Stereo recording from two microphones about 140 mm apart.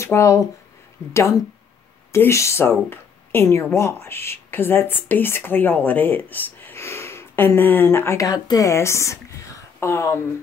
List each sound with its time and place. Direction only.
0.0 s speech: 20° left (ahead or behind)